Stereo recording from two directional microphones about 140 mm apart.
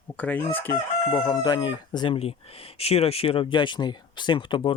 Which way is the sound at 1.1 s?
25° left (ahead or behind).